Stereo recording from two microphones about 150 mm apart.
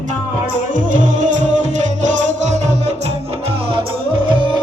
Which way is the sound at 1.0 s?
55° right (ahead or behind).